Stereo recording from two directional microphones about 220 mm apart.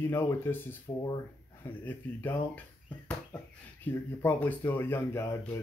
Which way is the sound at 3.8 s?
10° left (ahead or behind).